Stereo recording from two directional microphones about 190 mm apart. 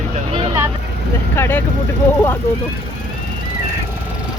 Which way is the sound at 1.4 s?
10° left (ahead or behind).